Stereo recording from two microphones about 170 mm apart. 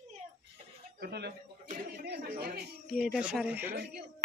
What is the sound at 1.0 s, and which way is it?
Speech, 75° right (ahead or behind).